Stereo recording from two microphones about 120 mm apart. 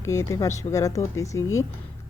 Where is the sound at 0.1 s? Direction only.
25° left (ahead or behind).